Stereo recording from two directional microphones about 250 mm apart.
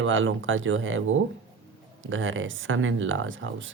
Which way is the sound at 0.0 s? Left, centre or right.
Right.